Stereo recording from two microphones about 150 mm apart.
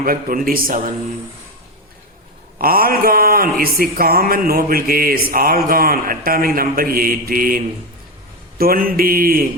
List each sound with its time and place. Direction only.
0.0 s a man's voice: 70° right (ahead or behind)
2.6 s a man's voice: 80° right